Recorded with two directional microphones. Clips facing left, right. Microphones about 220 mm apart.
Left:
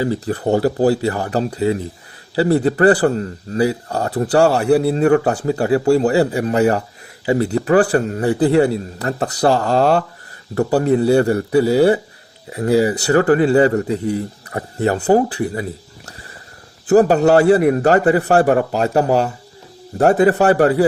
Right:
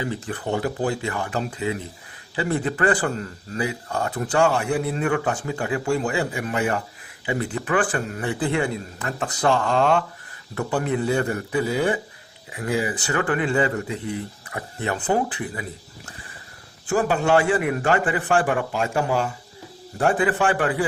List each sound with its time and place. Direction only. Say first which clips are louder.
0.0 s speech: left 9 dB; 35° left (ahead or behind)
16.8 s speech: left 10 dB; 40° left (ahead or behind)